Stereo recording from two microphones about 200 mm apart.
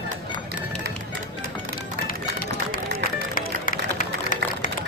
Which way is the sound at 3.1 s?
45° left (ahead or behind).